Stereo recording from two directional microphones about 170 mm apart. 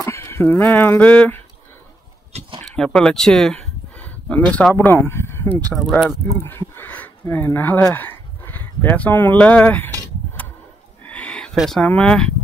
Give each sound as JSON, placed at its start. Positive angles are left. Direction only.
{"t": 0.0, "sound": "speech", "side_deg": 15}
{"t": 2.6, "sound": "speech", "side_deg": 5}
{"t": 5.8, "sound": "speech", "side_deg": 0}
{"t": 11.1, "sound": "livestock", "side_deg": 5}